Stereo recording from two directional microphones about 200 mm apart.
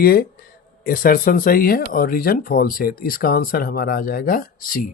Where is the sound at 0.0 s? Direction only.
50° left (ahead or behind).